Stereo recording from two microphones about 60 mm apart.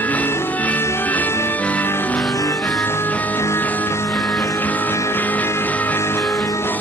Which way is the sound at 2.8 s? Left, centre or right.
Left.